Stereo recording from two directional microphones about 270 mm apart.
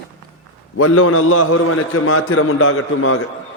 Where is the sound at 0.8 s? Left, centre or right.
Left.